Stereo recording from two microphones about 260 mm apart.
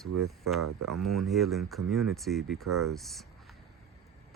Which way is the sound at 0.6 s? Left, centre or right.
Right.